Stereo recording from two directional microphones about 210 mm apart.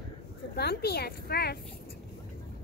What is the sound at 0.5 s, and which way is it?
A woman's voice, 50° left (ahead or behind).